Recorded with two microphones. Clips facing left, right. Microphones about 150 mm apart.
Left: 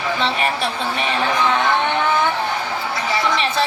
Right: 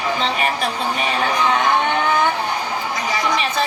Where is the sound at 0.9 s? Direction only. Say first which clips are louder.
Left 2 dB; 40° right (ahead or behind).